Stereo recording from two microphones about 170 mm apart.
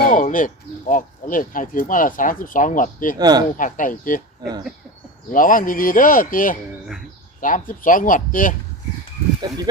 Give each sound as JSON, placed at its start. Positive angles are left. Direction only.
{"t": 0.1, "sound": "speech", "side_deg": 50}
{"t": 3.2, "sound": "speech", "side_deg": -25}
{"t": 3.6, "sound": "speech", "side_deg": 50}
{"t": 5.3, "sound": "speech", "side_deg": 50}